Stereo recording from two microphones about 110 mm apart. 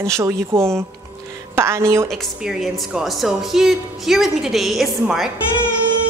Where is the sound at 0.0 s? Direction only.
25° right (ahead or behind).